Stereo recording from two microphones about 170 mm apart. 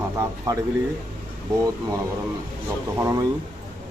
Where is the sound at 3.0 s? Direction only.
20° right (ahead or behind).